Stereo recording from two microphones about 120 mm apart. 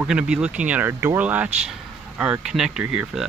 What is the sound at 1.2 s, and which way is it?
Speech, 10° right (ahead or behind).